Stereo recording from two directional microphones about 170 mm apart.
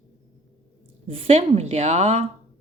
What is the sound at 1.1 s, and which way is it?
A woman's voice, 35° right (ahead or behind).